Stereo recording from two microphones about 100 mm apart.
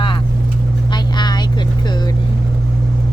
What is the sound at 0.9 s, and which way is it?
Vehicle, 45° left (ahead or behind).